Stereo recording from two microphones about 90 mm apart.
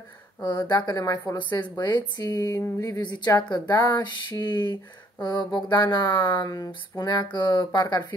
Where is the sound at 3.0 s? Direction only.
55° left (ahead or behind).